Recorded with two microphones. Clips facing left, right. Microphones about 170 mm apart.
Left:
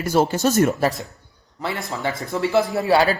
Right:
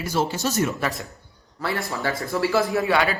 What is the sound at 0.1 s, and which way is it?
Speech, 50° left (ahead or behind).